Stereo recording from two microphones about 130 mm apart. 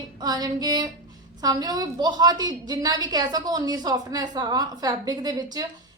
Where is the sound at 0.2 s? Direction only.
30° right (ahead or behind).